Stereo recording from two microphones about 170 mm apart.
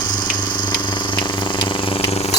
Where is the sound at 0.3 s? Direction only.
25° left (ahead or behind).